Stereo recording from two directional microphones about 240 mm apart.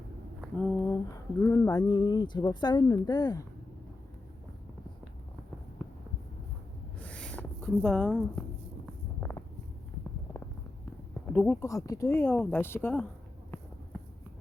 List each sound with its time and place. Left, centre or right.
0.6 s speech: centre
7.0 s rub: centre
8.9 s a sound: centre
11.3 s speech: centre